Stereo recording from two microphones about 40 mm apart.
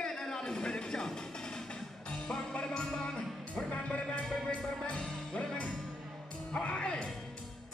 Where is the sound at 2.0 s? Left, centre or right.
Left.